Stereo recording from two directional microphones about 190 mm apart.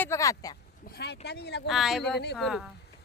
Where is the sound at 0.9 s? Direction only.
60° left (ahead or behind).